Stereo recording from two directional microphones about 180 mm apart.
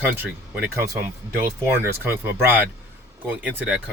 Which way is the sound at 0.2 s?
10° right (ahead or behind).